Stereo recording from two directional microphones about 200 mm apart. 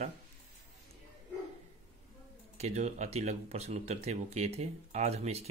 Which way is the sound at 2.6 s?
35° right (ahead or behind).